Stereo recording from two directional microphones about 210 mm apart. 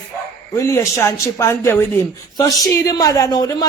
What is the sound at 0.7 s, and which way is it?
Speech, 15° left (ahead or behind).